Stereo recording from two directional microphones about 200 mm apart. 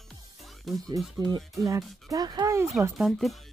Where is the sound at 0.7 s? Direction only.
Centre (ahead or behind).